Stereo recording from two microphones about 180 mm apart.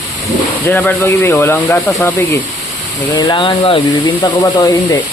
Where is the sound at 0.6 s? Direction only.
10° left (ahead or behind).